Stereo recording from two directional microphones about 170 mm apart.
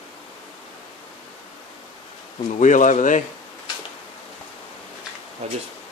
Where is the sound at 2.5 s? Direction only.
45° left (ahead or behind).